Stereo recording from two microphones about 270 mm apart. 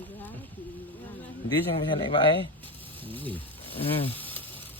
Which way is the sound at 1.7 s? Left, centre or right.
Centre.